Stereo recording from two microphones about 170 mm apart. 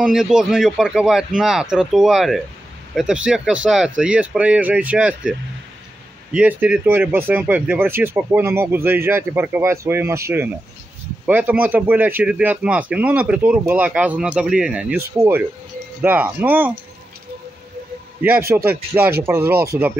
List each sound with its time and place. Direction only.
0.0 s speech: 5° right (ahead or behind)
6.3 s speech: 5° right (ahead or behind)
18.2 s speech: 15° right (ahead or behind)